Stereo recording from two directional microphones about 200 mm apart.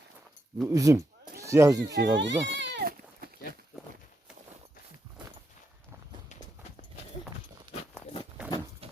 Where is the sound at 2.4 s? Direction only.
60° right (ahead or behind).